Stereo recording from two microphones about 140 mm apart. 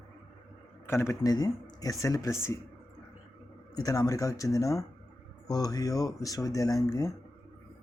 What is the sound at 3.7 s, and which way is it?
Speech, 25° left (ahead or behind).